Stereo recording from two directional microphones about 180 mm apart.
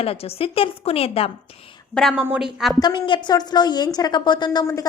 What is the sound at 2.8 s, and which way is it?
A woman's voice, 25° left (ahead or behind).